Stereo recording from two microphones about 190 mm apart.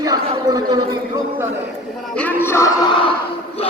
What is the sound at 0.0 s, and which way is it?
Speech, 20° right (ahead or behind).